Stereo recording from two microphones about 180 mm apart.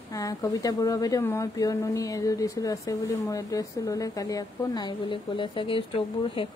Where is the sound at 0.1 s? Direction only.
20° left (ahead or behind).